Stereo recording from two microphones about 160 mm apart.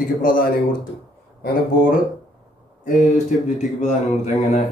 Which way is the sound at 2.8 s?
50° left (ahead or behind).